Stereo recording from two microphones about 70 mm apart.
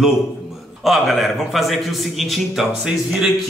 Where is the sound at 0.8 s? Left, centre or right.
Centre.